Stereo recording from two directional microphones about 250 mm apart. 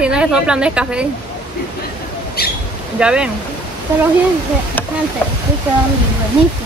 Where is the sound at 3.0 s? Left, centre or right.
Centre.